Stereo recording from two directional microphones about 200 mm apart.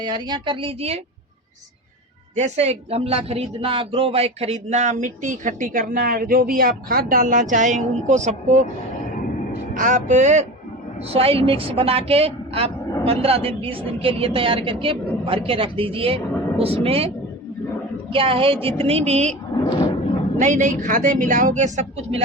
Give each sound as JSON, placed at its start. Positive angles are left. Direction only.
{"t": 0.0, "sound": "a woman's voice", "side_deg": -20}
{"t": 2.3, "sound": "a man's voice", "side_deg": -35}
{"t": 9.7, "sound": "a man's voice", "side_deg": -40}
{"t": 18.1, "sound": "a woman's voice", "side_deg": -25}
{"t": 19.5, "sound": "a sound", "side_deg": 20}
{"t": 20.4, "sound": "a man's voice", "side_deg": -40}